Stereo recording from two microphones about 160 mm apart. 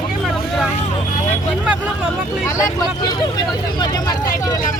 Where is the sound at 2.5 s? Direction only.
20° left (ahead or behind).